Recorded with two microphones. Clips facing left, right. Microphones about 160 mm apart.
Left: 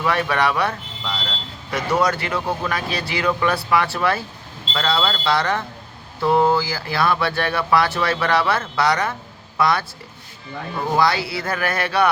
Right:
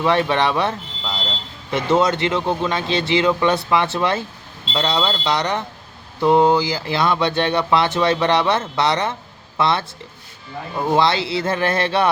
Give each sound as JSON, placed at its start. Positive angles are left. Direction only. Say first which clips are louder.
{"t": 0.0, "sound": "speech", "louder": "right 3 dB", "side_deg": -25}
{"t": 10.9, "sound": "speech", "louder": "right 2 dB", "side_deg": -25}